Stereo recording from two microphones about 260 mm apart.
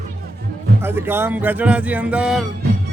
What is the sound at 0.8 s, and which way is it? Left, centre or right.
Speech, centre.